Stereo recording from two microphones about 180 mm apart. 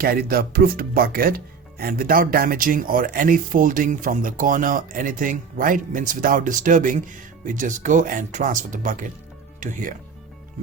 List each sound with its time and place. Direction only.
0.0 s speech: 55° right (ahead or behind)